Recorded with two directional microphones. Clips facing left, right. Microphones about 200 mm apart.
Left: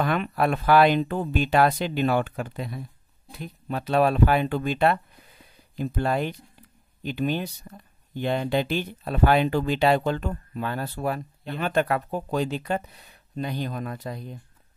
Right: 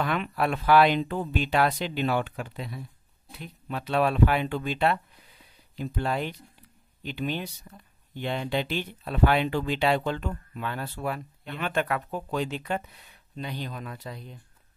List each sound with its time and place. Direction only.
0.0 s speech: 45° left (ahead or behind)